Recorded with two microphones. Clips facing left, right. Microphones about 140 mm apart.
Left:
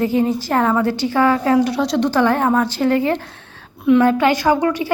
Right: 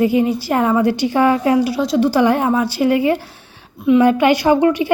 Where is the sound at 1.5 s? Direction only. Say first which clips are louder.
Right 1 dB; 5° right (ahead or behind).